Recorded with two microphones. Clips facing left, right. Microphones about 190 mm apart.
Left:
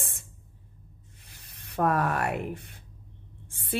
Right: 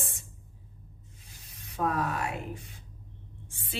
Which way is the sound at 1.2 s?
65° left (ahead or behind).